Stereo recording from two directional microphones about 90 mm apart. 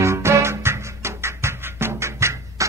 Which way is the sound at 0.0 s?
30° right (ahead or behind).